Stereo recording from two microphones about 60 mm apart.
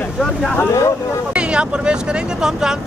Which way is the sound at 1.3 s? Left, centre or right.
Centre.